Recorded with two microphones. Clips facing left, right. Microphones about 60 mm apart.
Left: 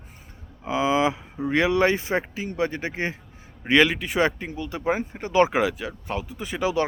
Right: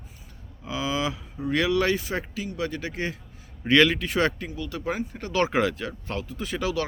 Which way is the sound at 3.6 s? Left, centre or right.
Centre.